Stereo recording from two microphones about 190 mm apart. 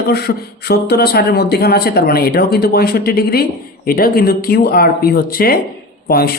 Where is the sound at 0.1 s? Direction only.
55° left (ahead or behind).